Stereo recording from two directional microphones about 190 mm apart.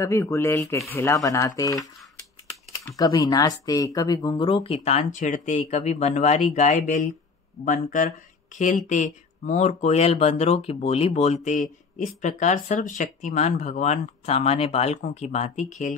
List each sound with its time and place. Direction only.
0.0 s speech: 15° left (ahead or behind)
3.0 s speech: 20° left (ahead or behind); by 15.9 s 35° left (ahead or behind)